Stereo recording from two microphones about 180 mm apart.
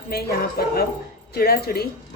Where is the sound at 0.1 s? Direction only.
55° left (ahead or behind).